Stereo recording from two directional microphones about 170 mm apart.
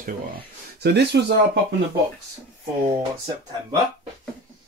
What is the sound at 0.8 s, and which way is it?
Speech, 80° right.